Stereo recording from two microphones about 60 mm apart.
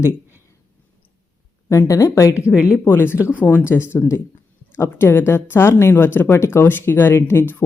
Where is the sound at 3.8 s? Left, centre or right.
Left.